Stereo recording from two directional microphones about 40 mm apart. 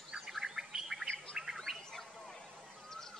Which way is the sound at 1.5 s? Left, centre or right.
Centre.